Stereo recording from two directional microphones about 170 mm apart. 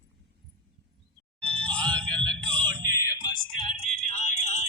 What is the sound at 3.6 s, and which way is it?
Music, 40° left (ahead or behind).